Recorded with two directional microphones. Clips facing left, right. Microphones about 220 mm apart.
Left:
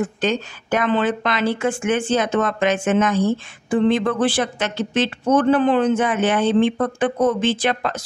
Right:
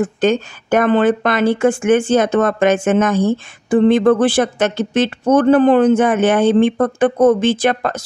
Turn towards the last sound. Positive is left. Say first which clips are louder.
# right 5 dB
turn(degrees=-45)  # may be behind; listen again after turning